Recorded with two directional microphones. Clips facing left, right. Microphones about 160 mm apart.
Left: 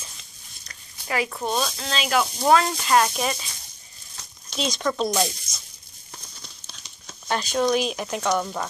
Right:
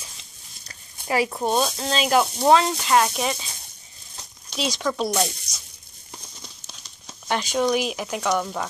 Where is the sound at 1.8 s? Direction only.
35° right (ahead or behind).